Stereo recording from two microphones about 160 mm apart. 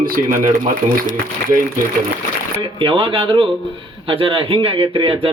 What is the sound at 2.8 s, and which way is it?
Speech, 35° right (ahead or behind).